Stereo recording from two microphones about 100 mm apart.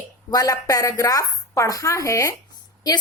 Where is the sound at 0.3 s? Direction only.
35° left (ahead or behind).